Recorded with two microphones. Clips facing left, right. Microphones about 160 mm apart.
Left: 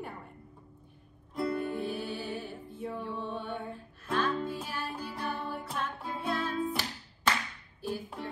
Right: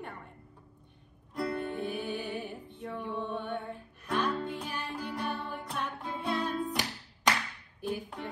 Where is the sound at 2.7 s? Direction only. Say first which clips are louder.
Left 3 dB; centre (ahead or behind).